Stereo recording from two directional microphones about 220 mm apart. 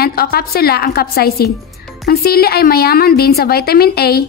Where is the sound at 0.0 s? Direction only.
45° left (ahead or behind).